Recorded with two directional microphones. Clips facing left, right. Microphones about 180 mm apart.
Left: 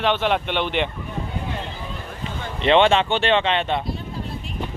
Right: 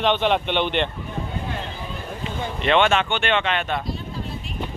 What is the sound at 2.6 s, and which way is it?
Speech, 30° left (ahead or behind).